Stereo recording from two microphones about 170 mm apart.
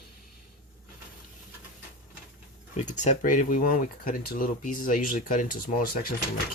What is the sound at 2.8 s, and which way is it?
Speech, 45° left (ahead or behind).